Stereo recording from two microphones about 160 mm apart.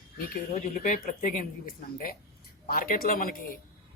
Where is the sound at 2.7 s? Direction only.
65° left (ahead or behind).